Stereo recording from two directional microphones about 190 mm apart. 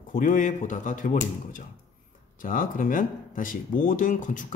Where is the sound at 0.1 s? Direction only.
45° left (ahead or behind).